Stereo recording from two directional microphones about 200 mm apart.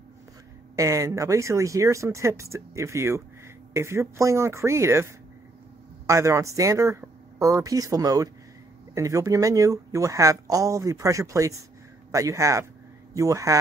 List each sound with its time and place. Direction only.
0.7 s speech: 15° right (ahead or behind)